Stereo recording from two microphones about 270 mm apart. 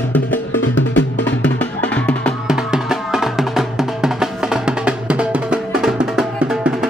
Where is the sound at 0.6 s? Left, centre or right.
Left.